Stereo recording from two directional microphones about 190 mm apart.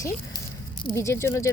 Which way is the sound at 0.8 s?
15° left (ahead or behind).